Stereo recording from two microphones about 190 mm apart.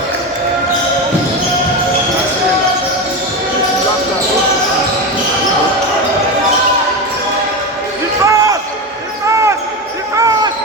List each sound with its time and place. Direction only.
8.2 s basketball bounce: 15° right (ahead or behind)
10.2 s basketball bounce: 20° right (ahead or behind)